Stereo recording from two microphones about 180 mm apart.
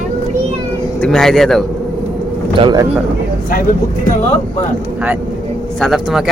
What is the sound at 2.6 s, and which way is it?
Speech, 25° right (ahead or behind).